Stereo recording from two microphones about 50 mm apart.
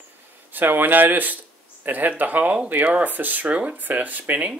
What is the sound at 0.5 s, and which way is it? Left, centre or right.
Speech, right.